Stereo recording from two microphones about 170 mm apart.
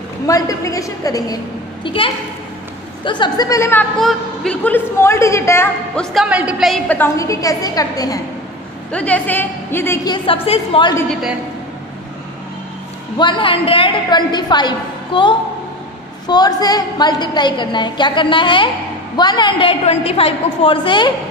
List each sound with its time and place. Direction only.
0.3 s a woman's voice: 20° left (ahead or behind)
1.9 s a woman's voice: 30° left (ahead or behind)
4.0 s a woman's voice: 5° left (ahead or behind)
5.9 s a woman's voice: 5° right (ahead or behind)
6.9 s a woman's voice: 15° left (ahead or behind)
8.9 s a woman's voice: 10° left (ahead or behind)
10.1 s a woman's voice: 35° left (ahead or behind)
11.1 s a woman's voice: centre (ahead or behind)
13.2 s a woman's voice: 30° left (ahead or behind)